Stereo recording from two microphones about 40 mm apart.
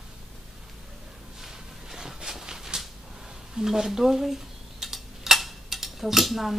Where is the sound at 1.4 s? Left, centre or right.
Centre.